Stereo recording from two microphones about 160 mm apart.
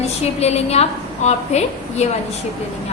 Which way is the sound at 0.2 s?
40° left (ahead or behind).